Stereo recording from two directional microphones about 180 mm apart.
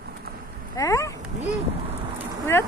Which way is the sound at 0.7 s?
15° left (ahead or behind).